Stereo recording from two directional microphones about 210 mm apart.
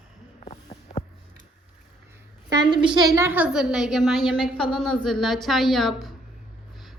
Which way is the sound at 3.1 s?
10° right (ahead or behind).